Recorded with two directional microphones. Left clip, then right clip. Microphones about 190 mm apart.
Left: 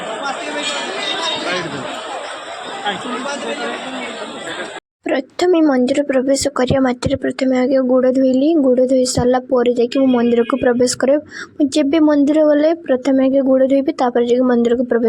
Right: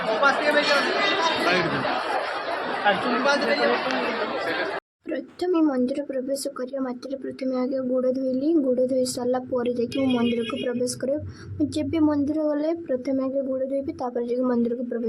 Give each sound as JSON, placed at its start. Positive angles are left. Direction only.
{"t": 5.0, "sound": "speech", "side_deg": 40}